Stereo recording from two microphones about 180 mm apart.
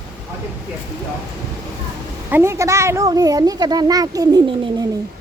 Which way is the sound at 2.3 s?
15° right (ahead or behind).